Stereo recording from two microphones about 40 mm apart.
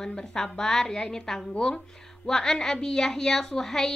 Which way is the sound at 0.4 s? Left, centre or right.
Centre.